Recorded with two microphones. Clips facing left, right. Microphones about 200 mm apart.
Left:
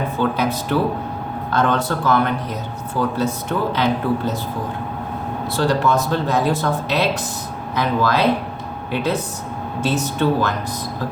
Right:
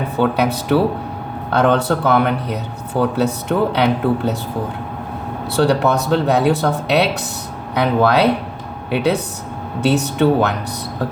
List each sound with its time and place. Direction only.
0.2 s speech: 70° right (ahead or behind)
5.5 s speech: 70° right (ahead or behind)